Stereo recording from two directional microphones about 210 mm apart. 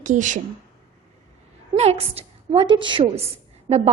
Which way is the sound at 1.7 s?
30° right (ahead or behind).